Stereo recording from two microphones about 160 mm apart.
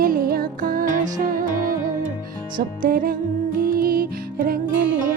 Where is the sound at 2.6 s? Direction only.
60° right (ahead or behind).